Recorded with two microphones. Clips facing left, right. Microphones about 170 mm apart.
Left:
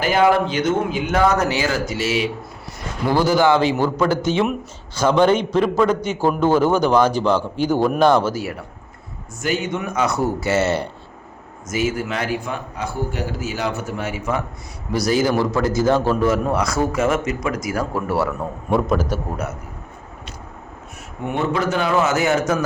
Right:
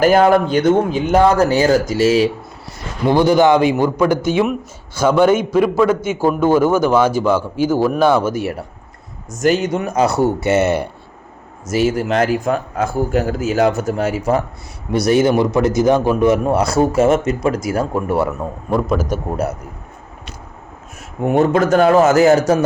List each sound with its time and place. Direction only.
0.0 s speech: 45° right (ahead or behind)
1.5 s speech: 45° right (ahead or behind)
3.1 s a man's voice: 20° right (ahead or behind); by 8.2 s 5° right (ahead or behind)
8.4 s a man's voice: 25° right (ahead or behind)
9.3 s a man's voice: 45° right (ahead or behind); by 10.8 s 15° right (ahead or behind)
11.7 s a man's voice: 35° right (ahead or behind)
15.0 s a man's voice: 25° right (ahead or behind)
21.2 s a man's voice: 40° right (ahead or behind)